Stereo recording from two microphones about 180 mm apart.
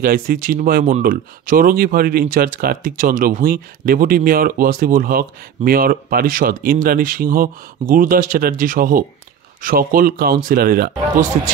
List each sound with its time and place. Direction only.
0.0 s speech: 50° right (ahead or behind)